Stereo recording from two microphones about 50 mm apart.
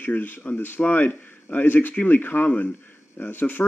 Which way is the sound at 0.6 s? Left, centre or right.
Left.